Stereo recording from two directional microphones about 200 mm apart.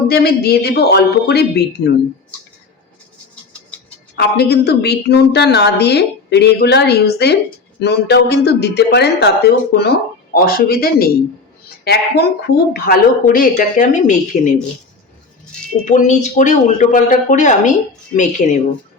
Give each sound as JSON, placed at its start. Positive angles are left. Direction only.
{"t": 0.1, "sound": "a woman's voice", "side_deg": 50}
{"t": 4.1, "sound": "a woman's voice", "side_deg": 55}
{"t": 15.8, "sound": "speech", "side_deg": 40}